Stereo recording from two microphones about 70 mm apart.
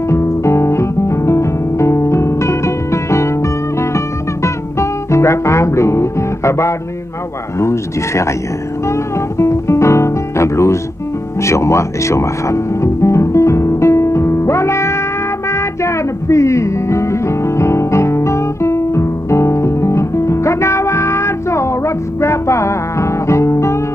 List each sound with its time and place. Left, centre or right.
0.1 s music: left
7.5 s speech: left
8.8 s music: left